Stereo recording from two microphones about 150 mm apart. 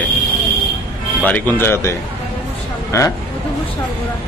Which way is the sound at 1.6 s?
15° left (ahead or behind).